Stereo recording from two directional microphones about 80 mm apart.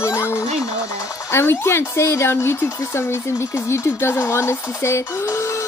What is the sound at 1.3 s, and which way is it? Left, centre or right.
Speech, left.